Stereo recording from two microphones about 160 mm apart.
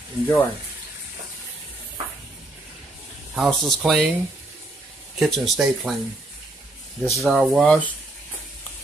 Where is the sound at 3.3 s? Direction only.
Centre (ahead or behind).